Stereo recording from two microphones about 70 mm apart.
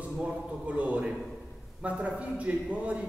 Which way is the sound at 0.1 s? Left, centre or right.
Centre.